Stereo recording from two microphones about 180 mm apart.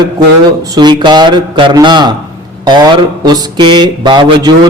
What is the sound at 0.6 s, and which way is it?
Speech, 25° right (ahead or behind).